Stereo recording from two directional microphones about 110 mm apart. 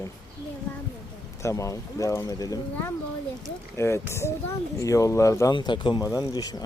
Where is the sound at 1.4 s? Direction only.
30° left (ahead or behind).